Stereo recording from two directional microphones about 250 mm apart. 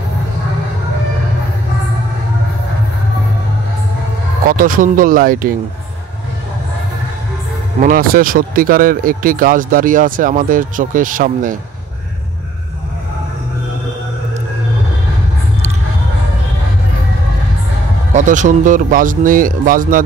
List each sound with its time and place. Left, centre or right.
4.5 s speech: right
7.8 s speech: right
18.1 s speech: right